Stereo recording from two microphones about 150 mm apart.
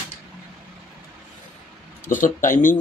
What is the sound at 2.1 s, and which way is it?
Speech, 60° left (ahead or behind).